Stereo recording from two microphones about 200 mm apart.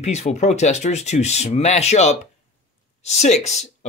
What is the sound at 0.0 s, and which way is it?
Speech, 35° left (ahead or behind).